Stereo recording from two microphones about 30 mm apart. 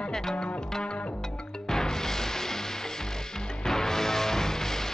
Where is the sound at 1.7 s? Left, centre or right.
Centre.